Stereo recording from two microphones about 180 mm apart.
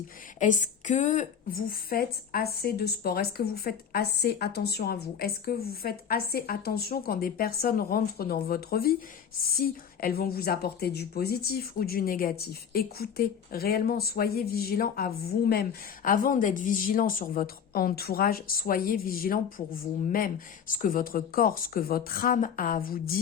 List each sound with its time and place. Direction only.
0.3 s a woman's voice: 45° left (ahead or behind)